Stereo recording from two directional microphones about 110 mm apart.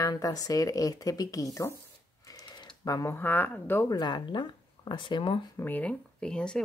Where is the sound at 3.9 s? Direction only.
40° left (ahead or behind).